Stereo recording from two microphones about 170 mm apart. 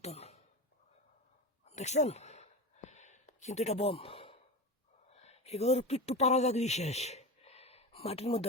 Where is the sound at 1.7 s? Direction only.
40° left (ahead or behind).